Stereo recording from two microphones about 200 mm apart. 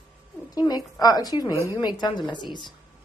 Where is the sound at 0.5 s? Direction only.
20° left (ahead or behind).